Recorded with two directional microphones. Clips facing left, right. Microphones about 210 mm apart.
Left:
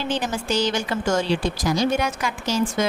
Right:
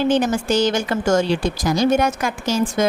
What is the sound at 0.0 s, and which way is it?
A woman's voice, 50° right (ahead or behind).